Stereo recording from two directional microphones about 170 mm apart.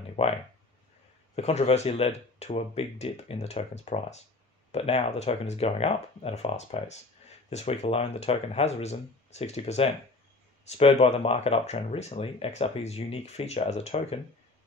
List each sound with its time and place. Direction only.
0.2 s speech: 35° left (ahead or behind)